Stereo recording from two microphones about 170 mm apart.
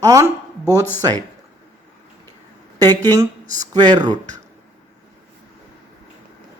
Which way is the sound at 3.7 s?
25° right (ahead or behind).